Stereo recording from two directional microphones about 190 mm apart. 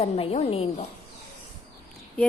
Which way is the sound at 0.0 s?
30° left (ahead or behind).